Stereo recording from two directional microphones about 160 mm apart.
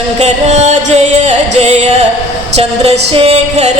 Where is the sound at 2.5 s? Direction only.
40° right (ahead or behind).